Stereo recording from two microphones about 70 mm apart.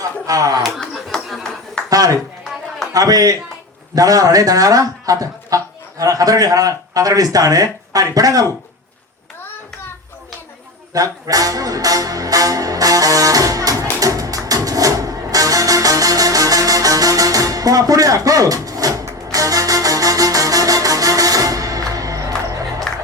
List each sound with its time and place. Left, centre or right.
0.3 s speech: right
0.6 s a sound: centre
1.9 s speech: right
10.9 s speech: right
14.0 s music: right
22.9 s music: centre